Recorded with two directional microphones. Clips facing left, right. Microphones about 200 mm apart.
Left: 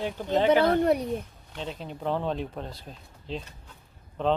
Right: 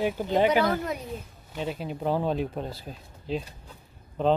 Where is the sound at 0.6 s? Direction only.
35° left (ahead or behind).